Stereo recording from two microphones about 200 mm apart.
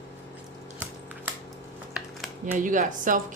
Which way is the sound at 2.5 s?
40° right (ahead or behind).